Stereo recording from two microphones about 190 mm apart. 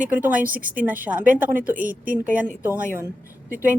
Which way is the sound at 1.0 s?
10° right (ahead or behind).